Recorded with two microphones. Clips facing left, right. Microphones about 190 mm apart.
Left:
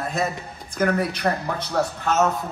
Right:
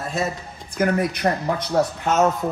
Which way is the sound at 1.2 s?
25° right (ahead or behind).